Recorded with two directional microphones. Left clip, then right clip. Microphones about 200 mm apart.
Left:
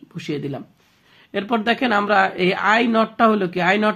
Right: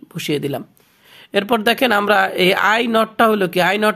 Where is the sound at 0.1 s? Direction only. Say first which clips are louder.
Right 6 dB; 45° right (ahead or behind).